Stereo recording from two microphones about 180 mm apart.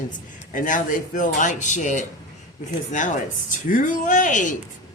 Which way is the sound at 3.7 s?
45° left (ahead or behind).